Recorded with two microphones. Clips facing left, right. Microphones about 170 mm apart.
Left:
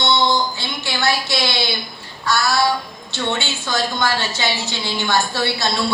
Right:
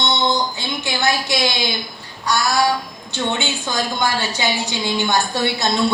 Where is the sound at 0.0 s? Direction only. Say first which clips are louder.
Left 1 dB; 20° right (ahead or behind).